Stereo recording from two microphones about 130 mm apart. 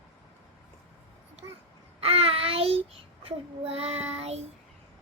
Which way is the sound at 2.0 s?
50° right (ahead or behind).